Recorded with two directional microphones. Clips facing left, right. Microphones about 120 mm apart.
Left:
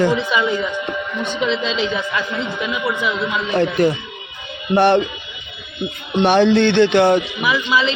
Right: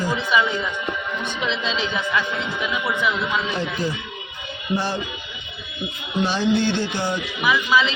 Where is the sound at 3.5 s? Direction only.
65° left (ahead or behind).